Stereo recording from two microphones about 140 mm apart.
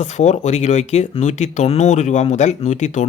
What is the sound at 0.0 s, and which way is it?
Speech, 55° left (ahead or behind).